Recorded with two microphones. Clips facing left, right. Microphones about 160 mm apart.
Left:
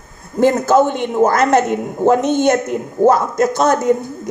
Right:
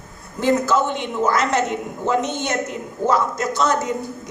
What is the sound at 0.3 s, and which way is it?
A woman's voice, 50° left (ahead or behind).